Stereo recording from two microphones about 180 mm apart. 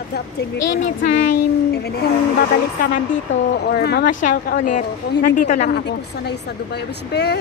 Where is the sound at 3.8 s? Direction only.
65° left (ahead or behind).